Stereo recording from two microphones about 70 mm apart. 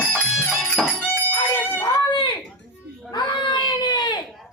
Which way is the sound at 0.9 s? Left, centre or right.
Left.